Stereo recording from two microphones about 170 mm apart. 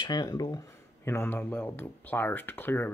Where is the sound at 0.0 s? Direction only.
25° left (ahead or behind).